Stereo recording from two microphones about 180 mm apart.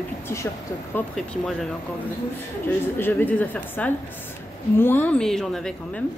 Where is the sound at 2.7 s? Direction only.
10° left (ahead or behind).